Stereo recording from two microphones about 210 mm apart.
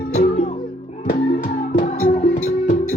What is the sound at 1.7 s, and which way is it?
Music, 40° left (ahead or behind).